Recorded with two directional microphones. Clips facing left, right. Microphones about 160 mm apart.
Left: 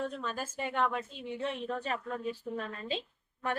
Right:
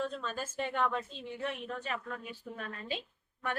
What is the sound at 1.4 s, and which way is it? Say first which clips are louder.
Speech: left 3 dB; 35° left (ahead or behind).